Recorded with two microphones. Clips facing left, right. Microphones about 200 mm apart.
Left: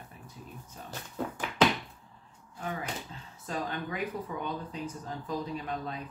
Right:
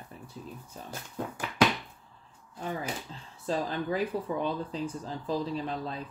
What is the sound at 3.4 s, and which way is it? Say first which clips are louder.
Speech: right 5 dB; 30° right (ahead or behind).